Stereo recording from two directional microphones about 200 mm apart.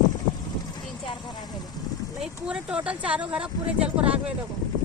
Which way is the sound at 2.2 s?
5° right (ahead or behind).